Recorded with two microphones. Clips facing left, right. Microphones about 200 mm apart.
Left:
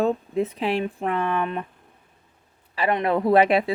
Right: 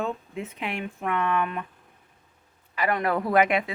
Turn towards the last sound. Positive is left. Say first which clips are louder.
# left 5 dB
turn(degrees=30)  # may be behind; listen again after turning